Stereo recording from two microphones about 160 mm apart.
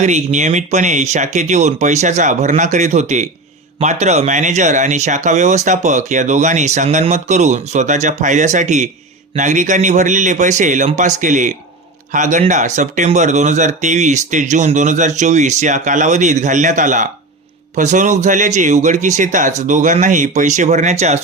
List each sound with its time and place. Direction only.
0.0 s speech: 45° right (ahead or behind)